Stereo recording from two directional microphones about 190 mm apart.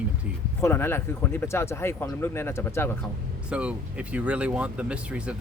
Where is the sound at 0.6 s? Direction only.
10° left (ahead or behind).